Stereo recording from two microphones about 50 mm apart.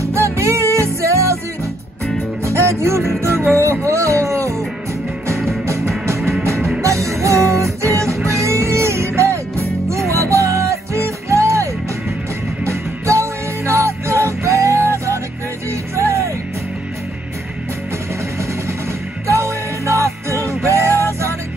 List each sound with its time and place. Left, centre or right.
0.0 s music: right
2.4 s music: right
3.6 s music: right
6.0 s music: right
6.8 s music: right
19.2 s music: right